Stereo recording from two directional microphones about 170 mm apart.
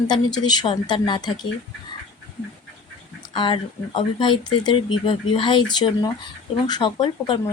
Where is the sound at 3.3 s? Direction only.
30° left (ahead or behind).